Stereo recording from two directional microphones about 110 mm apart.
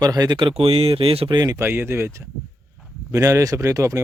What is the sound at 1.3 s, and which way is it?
Speech, 40° right (ahead or behind).